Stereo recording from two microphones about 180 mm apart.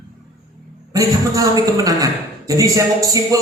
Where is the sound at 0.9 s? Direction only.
20° right (ahead or behind).